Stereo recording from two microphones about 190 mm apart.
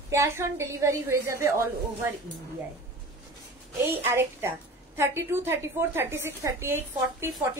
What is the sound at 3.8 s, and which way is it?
A woman's voice, 10° right (ahead or behind).